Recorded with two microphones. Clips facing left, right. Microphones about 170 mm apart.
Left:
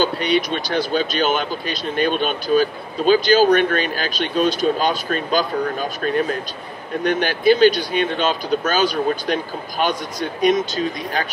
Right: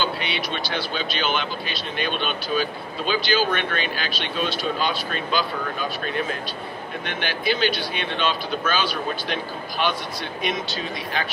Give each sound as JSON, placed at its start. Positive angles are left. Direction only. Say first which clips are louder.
{"t": 0.0, "sound": "speech", "louder": "left 8 dB", "side_deg": 45}